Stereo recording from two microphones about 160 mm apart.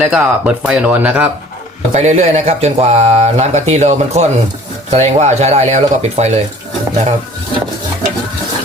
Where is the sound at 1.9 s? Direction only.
45° right (ahead or behind).